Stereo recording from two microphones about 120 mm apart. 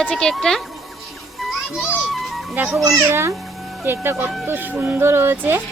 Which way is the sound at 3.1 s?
20° right (ahead or behind).